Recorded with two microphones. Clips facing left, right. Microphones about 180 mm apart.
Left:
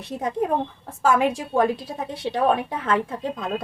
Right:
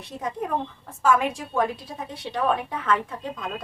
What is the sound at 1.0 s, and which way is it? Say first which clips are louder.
A woman's voice: left 2 dB; 30° left (ahead or behind).